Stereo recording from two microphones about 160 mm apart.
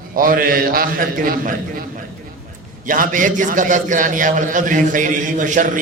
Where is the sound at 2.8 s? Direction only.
55° right (ahead or behind).